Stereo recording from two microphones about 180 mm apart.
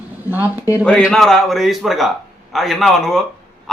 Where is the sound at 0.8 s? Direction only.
5° left (ahead or behind).